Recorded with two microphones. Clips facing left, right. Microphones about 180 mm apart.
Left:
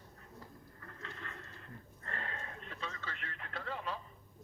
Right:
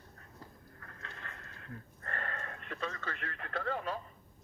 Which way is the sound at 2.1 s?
55° right (ahead or behind).